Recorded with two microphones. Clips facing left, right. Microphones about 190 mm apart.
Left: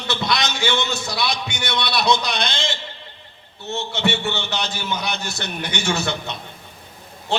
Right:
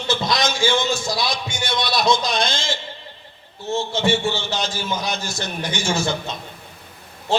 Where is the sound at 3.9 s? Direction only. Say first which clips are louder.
Right 2 dB; 65° left (ahead or behind).